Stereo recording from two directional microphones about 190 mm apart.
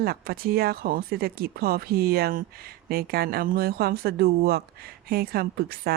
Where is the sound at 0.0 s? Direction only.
50° right (ahead or behind).